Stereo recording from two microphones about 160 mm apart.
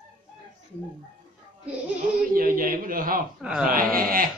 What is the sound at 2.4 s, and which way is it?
Speech, 65° right (ahead or behind).